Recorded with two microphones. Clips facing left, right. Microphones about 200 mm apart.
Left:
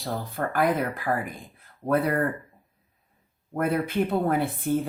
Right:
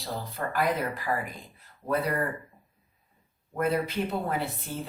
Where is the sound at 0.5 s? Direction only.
50° left (ahead or behind).